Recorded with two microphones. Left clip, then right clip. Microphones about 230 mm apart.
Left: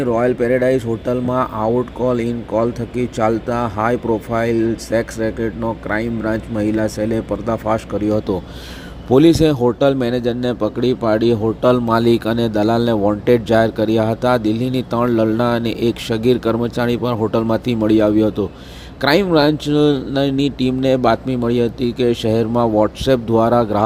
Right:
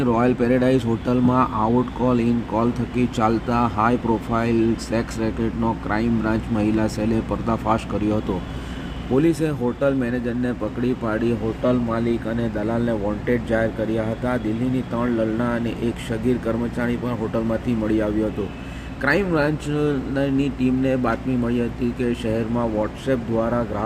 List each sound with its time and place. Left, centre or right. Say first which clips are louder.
0.0 s speech: left 4 dB; centre
9.1 s speech: left 9 dB; left